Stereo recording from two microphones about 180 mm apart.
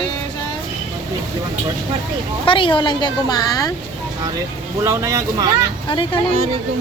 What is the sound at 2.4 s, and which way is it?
A woman's voice, 30° left (ahead or behind).